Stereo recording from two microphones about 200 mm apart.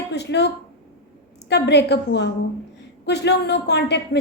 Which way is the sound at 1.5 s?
55° left (ahead or behind).